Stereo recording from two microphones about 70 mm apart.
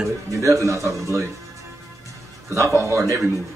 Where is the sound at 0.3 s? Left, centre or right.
Right.